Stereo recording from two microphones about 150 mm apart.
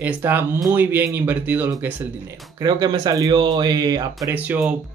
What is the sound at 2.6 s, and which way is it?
Speech, 25° right (ahead or behind).